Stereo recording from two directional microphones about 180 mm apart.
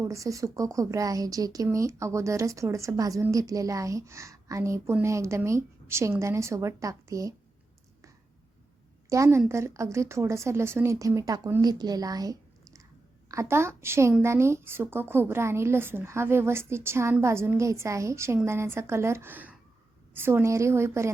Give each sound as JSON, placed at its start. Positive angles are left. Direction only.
{"t": 0.0, "sound": "speech", "side_deg": -15}
{"t": 9.0, "sound": "a woman's voice", "side_deg": -15}